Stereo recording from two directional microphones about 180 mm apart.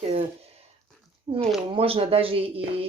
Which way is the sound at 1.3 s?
35° right (ahead or behind).